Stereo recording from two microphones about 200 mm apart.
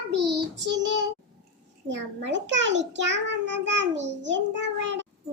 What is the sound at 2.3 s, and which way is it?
A child's voice, 65° right (ahead or behind).